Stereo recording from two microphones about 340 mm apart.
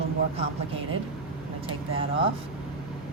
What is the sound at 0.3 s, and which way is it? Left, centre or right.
A woman's voice, centre.